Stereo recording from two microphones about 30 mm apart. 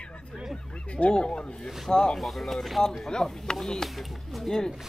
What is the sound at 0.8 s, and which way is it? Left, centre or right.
Speech, left.